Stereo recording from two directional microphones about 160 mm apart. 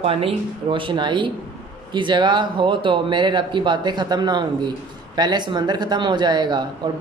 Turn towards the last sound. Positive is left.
turn(degrees=-30)  # may be behind; listen again after turning